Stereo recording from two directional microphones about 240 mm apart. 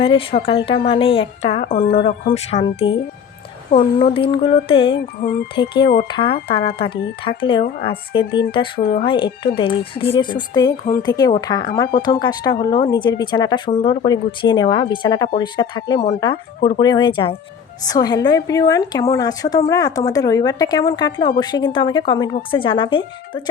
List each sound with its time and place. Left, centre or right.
0.0 s a woman's voice: left
4.0 s a woman's voice: left
8.8 s speech: left
9.0 s a woman's voice: left